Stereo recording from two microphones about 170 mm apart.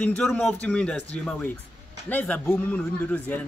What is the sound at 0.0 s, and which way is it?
Speech, 5° left (ahead or behind).